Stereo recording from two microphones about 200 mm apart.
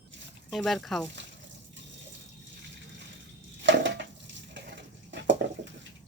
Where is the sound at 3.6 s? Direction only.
65° right (ahead or behind).